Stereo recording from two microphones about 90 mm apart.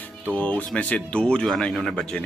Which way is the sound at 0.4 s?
15° left (ahead or behind).